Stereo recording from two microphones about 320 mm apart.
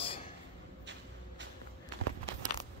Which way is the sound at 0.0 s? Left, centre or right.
Centre.